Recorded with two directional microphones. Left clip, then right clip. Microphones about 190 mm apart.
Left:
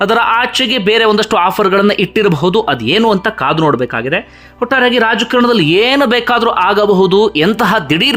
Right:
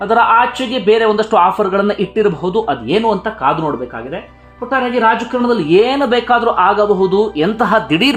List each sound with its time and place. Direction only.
0.0 s speech: 30° left (ahead or behind)